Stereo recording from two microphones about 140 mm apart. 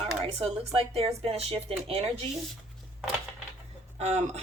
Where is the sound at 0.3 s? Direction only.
45° right (ahead or behind).